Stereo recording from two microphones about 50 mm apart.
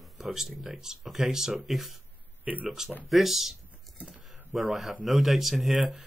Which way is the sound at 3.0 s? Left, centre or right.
Centre.